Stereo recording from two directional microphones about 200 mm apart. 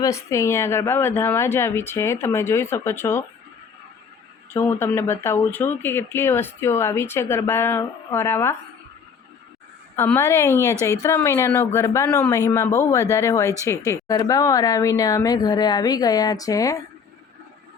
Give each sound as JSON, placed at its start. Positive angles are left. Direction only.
{"t": 0.0, "sound": "speech", "side_deg": 15}
{"t": 4.5, "sound": "speech", "side_deg": 10}
{"t": 9.9, "sound": "speech", "side_deg": 15}